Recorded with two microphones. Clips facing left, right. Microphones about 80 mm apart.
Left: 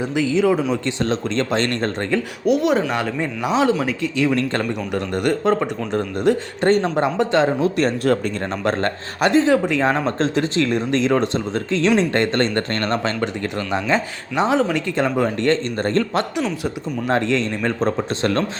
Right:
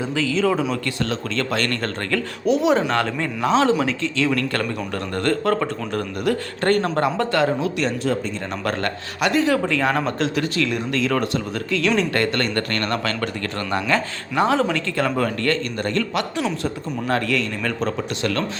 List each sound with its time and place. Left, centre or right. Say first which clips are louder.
0.0 s a man's voice: left 3 dB; centre
2.5 s speech: even; centre
4.4 s a man's voice: left 2 dB; left
7.8 s speech: left 4 dB; left
8.6 s a man's voice: left 3 dB; left